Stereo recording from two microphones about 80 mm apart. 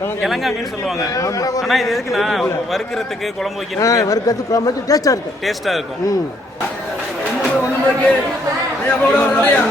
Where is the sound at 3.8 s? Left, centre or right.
Left.